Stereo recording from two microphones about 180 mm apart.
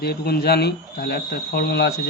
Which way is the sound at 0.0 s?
60° left (ahead or behind).